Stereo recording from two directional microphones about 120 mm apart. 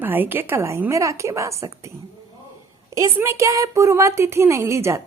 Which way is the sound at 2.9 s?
25° right (ahead or behind).